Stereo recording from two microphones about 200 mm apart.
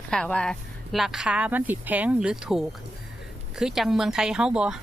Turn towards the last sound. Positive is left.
turn(degrees=-5)  # may be behind; listen again after turning